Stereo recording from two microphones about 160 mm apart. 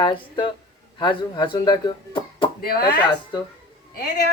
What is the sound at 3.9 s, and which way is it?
Speech, 90° left.